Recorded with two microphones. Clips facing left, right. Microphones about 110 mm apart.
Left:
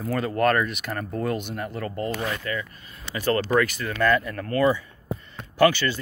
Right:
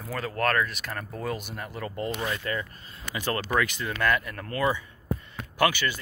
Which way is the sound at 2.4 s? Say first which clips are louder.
Left 1 dB; 30° right (ahead or behind).